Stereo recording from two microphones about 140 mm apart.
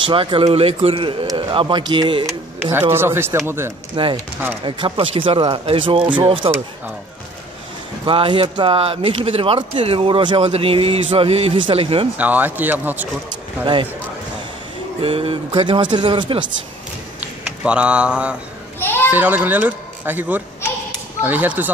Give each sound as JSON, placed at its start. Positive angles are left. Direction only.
{"t": 0.0, "sound": "speech", "side_deg": -35}
{"t": 2.7, "sound": "a child's voice", "side_deg": -15}
{"t": 3.9, "sound": "speech", "side_deg": -35}
{"t": 8.0, "sound": "speech", "side_deg": -40}
{"t": 12.2, "sound": "a child's voice", "side_deg": -10}
{"t": 15.0, "sound": "speech", "side_deg": -40}
{"t": 17.6, "sound": "a child's voice", "side_deg": -10}